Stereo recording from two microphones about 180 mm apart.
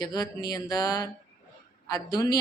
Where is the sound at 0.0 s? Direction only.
20° left (ahead or behind).